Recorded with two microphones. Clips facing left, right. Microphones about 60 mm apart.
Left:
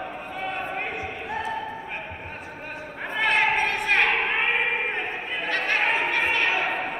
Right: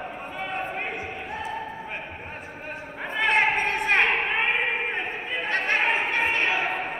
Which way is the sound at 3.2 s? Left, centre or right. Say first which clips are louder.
Even; right.